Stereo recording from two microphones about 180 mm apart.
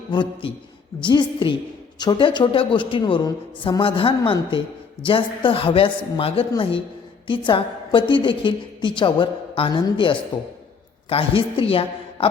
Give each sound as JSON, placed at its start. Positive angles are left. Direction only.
{"t": 0.1, "sound": "a woman's voice", "side_deg": 25}